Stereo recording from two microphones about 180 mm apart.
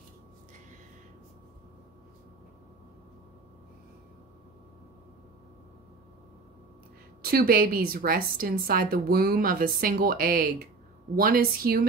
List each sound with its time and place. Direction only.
7.2 s a woman's voice: 55° right (ahead or behind)